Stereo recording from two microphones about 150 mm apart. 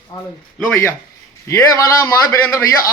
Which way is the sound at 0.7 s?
15° left (ahead or behind).